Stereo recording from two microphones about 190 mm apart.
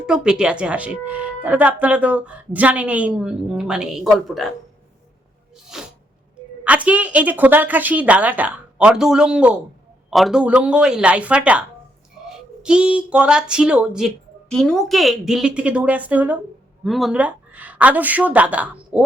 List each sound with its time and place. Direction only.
0.0 s speech: 5° right (ahead or behind)
5.7 s a sound: 5° right (ahead or behind)
6.7 s a woman's voice: 5° right (ahead or behind)
12.6 s a woman's voice: 5° right (ahead or behind)